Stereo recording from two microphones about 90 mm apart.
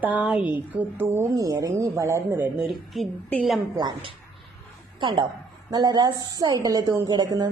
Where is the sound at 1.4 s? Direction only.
40° right (ahead or behind); by 2.6 s 25° right (ahead or behind).